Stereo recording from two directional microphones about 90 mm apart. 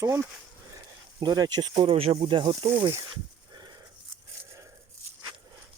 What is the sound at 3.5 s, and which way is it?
Wheeze, 50° right (ahead or behind).